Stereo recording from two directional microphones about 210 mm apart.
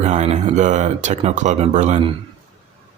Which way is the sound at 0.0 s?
35° right (ahead or behind).